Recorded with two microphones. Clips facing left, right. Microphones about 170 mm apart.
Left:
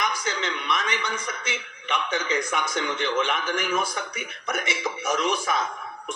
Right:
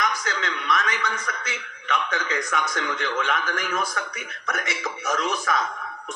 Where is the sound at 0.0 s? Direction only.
25° left (ahead or behind).